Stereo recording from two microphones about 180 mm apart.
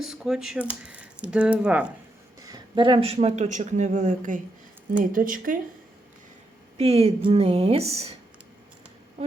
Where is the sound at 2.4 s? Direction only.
25° right (ahead or behind); by 5.6 s 50° right (ahead or behind).